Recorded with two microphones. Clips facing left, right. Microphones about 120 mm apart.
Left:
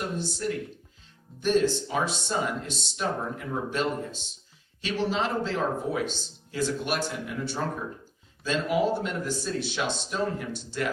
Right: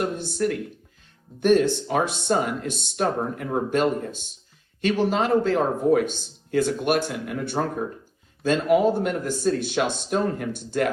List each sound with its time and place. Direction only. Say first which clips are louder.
0.0 s speech: right 6 dB; 55° right (ahead or behind)